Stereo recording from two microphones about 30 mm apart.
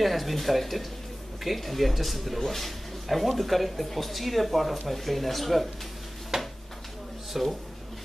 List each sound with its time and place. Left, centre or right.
0.0 s speech: centre
6.3 s a sound: centre
7.3 s speech: centre